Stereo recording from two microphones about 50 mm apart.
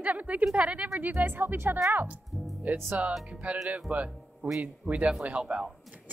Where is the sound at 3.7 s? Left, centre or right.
Right.